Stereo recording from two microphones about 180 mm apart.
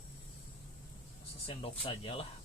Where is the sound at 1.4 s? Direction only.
30° left (ahead or behind).